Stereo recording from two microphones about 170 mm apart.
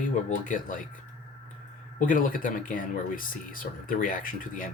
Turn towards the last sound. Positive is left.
turn(degrees=55)  # may be behind; listen again after turning